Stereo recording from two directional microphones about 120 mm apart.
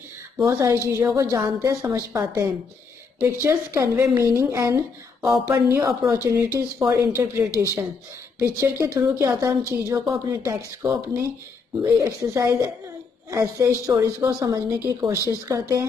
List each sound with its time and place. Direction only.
0.5 s a woman's voice: 25° right (ahead or behind)